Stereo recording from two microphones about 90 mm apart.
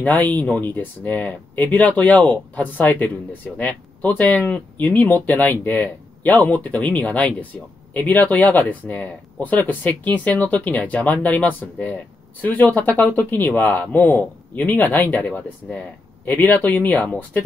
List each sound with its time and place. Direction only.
0.0 s speech: 20° left (ahead or behind)